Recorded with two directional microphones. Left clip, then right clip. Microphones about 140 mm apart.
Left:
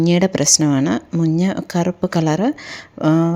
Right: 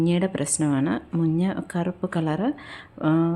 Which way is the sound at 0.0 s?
45° left (ahead or behind).